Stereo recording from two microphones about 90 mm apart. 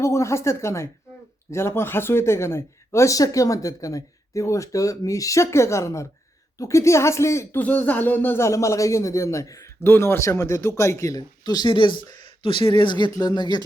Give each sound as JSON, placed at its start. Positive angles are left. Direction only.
{"t": 0.0, "sound": "speech", "side_deg": 35}
{"t": 7.6, "sound": "speech", "side_deg": 20}
{"t": 13.1, "sound": "speech", "side_deg": 50}